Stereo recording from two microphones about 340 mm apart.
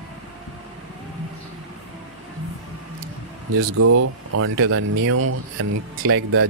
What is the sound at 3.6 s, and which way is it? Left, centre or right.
Speech, right.